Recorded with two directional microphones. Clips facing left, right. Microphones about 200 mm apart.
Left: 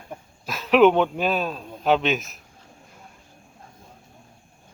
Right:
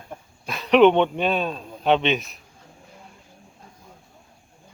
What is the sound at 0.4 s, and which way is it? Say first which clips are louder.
Mantra: right 1 dB; 5° left (ahead or behind).